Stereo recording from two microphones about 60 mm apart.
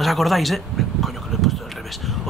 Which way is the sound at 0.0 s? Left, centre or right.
Centre.